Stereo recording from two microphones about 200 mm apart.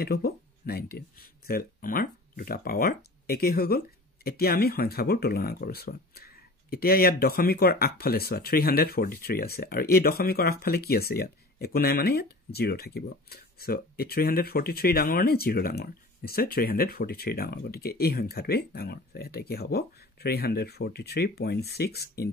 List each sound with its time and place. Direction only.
0.0 s speech: 50° left (ahead or behind)